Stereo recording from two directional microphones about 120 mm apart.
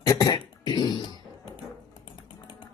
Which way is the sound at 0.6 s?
40° left (ahead or behind).